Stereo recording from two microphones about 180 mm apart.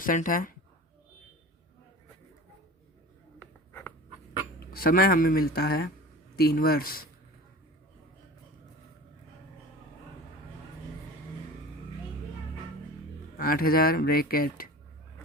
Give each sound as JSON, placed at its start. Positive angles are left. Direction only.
{"t": 0.0, "sound": "a woman's voice", "side_deg": 50}
{"t": 3.7, "sound": "writing", "side_deg": 10}
{"t": 4.7, "sound": "speech", "side_deg": 55}
{"t": 13.3, "sound": "speech", "side_deg": 55}